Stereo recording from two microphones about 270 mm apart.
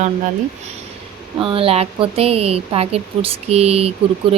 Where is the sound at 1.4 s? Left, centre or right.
Centre.